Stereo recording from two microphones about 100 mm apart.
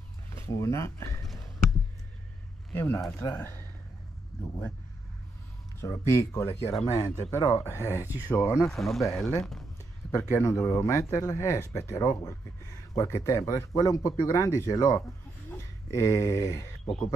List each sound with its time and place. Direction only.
0.3 s speech: 30° left (ahead or behind)
2.7 s speech: 20° left (ahead or behind)
4.3 s speech: centre (ahead or behind)
5.8 s speech: 30° left (ahead or behind)
8.5 s speech: centre (ahead or behind)
10.6 s speech: 30° left (ahead or behind)